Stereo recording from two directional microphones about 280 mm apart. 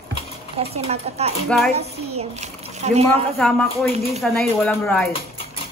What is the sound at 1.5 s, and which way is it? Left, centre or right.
Speech, centre.